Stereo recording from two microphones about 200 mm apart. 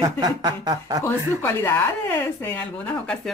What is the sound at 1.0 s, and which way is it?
Speech, 10° left (ahead or behind).